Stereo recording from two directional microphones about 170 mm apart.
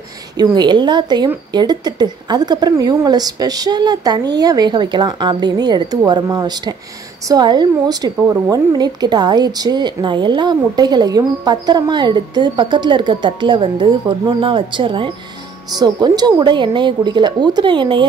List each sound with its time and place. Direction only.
0.4 s a woman's voice: 25° right (ahead or behind)